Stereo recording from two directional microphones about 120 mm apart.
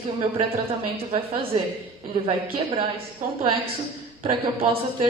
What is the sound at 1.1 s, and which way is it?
A woman's voice, 45° right (ahead or behind).